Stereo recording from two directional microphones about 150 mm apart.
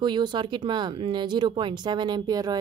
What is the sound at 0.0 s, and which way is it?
A woman's voice, 30° right (ahead or behind).